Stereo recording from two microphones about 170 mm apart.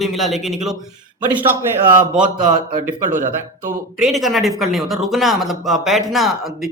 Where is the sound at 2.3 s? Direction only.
30° right (ahead or behind).